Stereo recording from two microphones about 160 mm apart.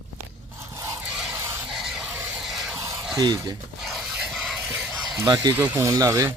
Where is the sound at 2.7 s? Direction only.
20° right (ahead or behind).